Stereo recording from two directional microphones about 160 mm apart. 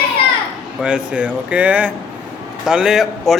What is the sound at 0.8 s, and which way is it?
Speech, 5° right (ahead or behind).